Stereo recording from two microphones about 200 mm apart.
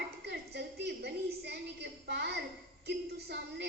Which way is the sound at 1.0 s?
55° right (ahead or behind).